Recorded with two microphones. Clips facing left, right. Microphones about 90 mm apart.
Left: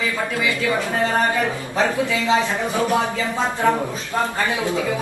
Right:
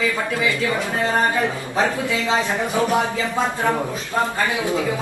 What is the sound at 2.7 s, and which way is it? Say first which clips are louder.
Speech: right 1 dB; 20° right (ahead or behind).